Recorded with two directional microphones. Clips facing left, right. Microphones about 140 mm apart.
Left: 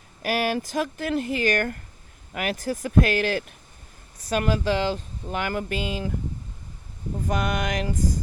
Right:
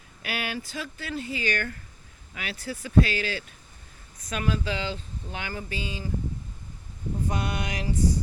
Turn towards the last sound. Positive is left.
turn(degrees=50)  # may be behind; listen again after turning